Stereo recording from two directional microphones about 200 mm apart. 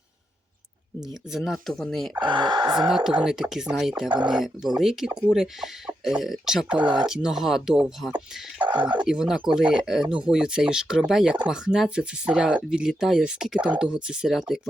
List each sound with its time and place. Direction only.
1.3 s speech: centre (ahead or behind)
2.1 s speech: 20° right (ahead or behind)
2.7 s speech: centre (ahead or behind)
8.8 s speech: 20° right (ahead or behind)
9.0 s speech: 5° right (ahead or behind)